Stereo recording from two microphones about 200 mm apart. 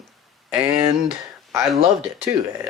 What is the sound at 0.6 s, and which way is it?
Speech, 15° right (ahead or behind).